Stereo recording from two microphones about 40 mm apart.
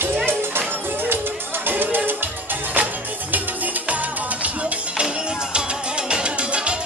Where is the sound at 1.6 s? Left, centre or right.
Right.